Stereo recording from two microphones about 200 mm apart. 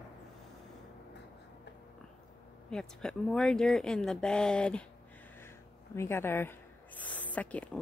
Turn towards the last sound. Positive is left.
turn(degrees=5)  # may be behind; listen again after turning